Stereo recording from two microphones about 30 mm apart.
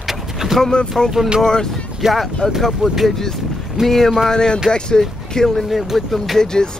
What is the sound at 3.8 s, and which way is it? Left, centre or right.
Speech, centre.